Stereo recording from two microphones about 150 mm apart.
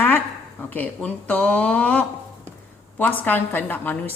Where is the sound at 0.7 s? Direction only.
10° left (ahead or behind).